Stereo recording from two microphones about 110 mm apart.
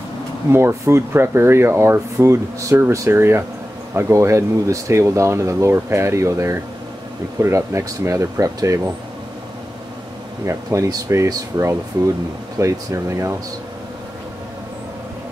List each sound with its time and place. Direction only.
0.5 s speech: 25° right (ahead or behind)
10.4 s speech: 25° right (ahead or behind)